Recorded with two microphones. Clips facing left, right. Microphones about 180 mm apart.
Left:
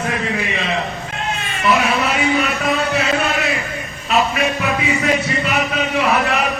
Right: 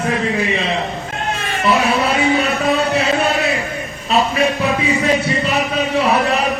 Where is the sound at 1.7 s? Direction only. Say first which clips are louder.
Right 1 dB; 30° right (ahead or behind).